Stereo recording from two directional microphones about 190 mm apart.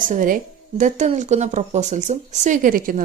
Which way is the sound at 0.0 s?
45° right (ahead or behind).